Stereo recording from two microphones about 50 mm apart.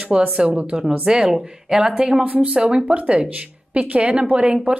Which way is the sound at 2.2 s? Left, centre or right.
Right.